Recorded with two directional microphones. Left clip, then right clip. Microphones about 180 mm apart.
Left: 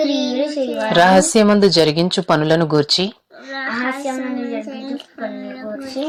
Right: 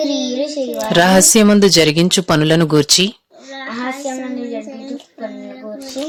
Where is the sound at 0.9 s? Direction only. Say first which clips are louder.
Right 1 dB; 30° right (ahead or behind).